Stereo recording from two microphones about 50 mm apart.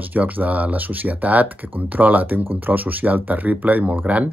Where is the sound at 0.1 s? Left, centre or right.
Right.